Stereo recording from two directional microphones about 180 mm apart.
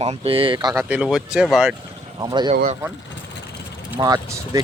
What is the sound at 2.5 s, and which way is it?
Speech, 50° right (ahead or behind).